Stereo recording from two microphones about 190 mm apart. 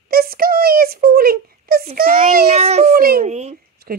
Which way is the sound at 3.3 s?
35° right (ahead or behind).